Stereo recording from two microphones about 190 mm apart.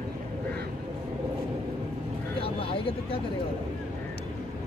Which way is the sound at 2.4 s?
30° left (ahead or behind).